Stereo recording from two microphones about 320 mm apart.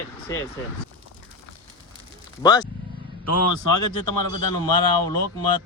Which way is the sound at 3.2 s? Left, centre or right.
Left.